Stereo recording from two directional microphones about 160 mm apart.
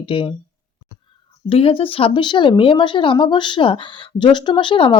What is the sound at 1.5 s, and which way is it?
Speech, 35° left (ahead or behind).